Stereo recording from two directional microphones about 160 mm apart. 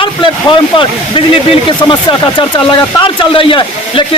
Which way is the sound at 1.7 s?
30° left (ahead or behind).